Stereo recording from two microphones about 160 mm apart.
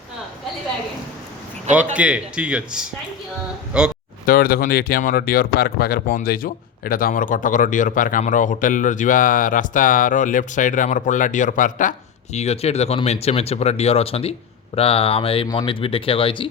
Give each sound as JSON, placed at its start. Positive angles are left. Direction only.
{"t": 1.7, "sound": "speech", "side_deg": -10}
{"t": 4.3, "sound": "speech", "side_deg": 65}